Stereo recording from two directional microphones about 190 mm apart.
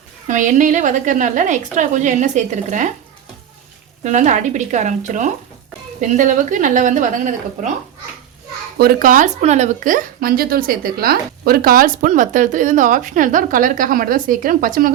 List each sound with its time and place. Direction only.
0.3 s a woman's voice: 40° right (ahead or behind)
4.0 s a woman's voice: 40° right (ahead or behind)
8.8 s a woman's voice: 50° right (ahead or behind)